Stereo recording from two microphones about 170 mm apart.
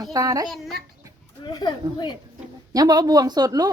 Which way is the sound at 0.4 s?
Centre (ahead or behind).